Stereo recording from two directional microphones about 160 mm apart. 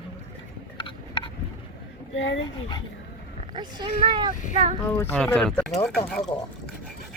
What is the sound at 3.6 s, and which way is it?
Speech, 25° right (ahead or behind).